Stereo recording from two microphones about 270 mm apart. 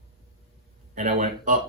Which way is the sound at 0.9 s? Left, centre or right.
Right.